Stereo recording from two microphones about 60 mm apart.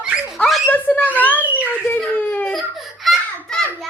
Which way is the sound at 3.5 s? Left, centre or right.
Centre.